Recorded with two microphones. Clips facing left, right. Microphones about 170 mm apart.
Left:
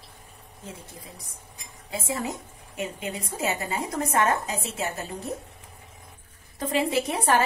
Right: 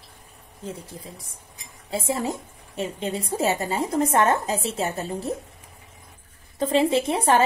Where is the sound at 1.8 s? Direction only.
30° right (ahead or behind).